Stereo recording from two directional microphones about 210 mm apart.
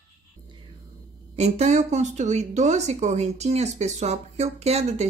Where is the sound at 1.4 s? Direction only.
30° right (ahead or behind).